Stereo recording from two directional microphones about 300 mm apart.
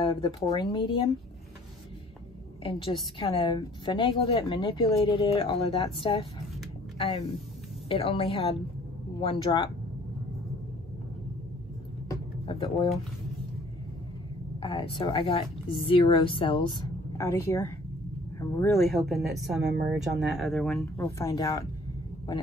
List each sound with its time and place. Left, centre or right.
0.0 s a woman's voice: centre
2.6 s a woman's voice: centre
7.9 s a woman's voice: centre
12.1 s a sound: centre
14.6 s a woman's voice: centre